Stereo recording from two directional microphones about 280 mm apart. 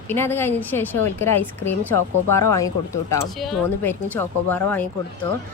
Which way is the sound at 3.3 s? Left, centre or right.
Centre.